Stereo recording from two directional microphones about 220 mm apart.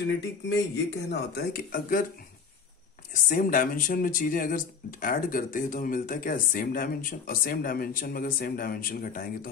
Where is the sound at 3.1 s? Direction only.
35° left (ahead or behind).